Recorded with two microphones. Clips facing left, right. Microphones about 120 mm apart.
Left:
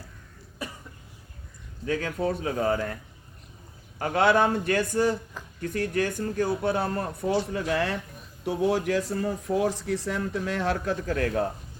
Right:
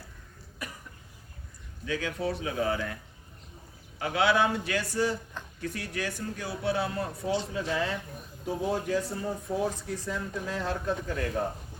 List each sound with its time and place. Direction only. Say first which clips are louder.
0.6 s cough: left 4 dB; 30° left (ahead or behind)
1.8 s speech: left 4 dB; 45° left (ahead or behind)
7.4 s speech: left 3 dB; 65° left (ahead or behind)
8.4 s speech: left 5 dB; 80° left